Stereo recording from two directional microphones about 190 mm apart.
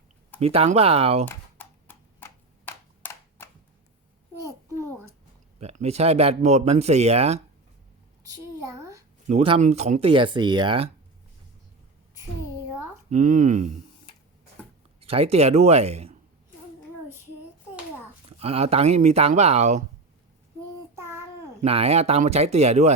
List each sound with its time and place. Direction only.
0.3 s speech: 30° right (ahead or behind)
1.3 s typewriter: 10° left (ahead or behind)
4.4 s babbling: 15° right (ahead or behind)
5.5 s speech: 35° right (ahead or behind)
8.2 s a sound: 15° right (ahead or behind)
9.2 s speech: 30° right (ahead or behind)
13.1 s speech: 40° right (ahead or behind)
15.0 s speech: 30° right (ahead or behind)
18.3 s speech: 30° right (ahead or behind)
20.9 s child singing: 15° right (ahead or behind)
21.6 s speech: 30° right (ahead or behind)